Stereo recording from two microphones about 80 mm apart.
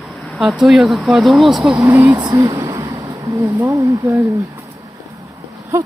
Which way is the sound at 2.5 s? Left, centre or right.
Right.